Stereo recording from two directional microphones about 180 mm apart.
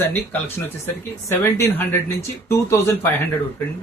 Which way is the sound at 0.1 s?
10° left (ahead or behind).